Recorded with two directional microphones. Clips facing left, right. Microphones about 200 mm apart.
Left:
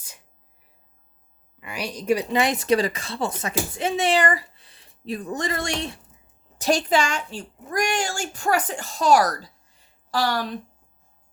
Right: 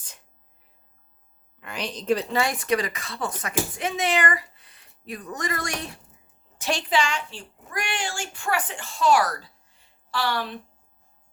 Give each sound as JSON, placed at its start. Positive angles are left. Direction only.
{"t": 1.5, "sound": "speech", "side_deg": 10}
{"t": 6.6, "sound": "a woman's voice", "side_deg": 40}